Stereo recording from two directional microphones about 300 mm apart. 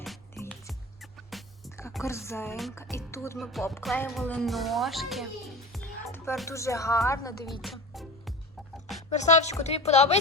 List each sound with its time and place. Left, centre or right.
1.3 s speech: centre
7.6 s music: centre
9.0 s speech: left